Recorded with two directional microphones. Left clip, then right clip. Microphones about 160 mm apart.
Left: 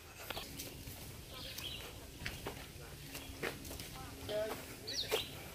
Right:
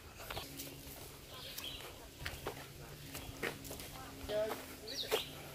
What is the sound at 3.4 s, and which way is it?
Walk, 15° right (ahead or behind).